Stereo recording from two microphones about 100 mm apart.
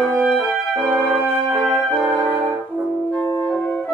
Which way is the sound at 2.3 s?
20° right (ahead or behind).